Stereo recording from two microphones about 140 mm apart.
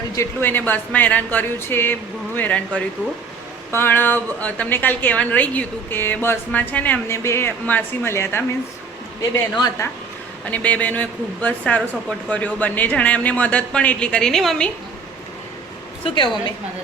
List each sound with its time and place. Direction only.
0.2 s a woman's voice: 15° left (ahead or behind)
9.6 s a woman's voice: 30° left (ahead or behind)
10.5 s a woman's voice: 10° left (ahead or behind)
16.0 s a woman's voice: 35° left (ahead or behind)